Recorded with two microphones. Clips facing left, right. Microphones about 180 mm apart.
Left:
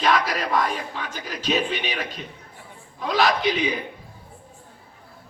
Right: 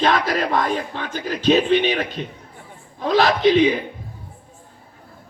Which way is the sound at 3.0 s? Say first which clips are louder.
Right 5 dB; 40° right (ahead or behind).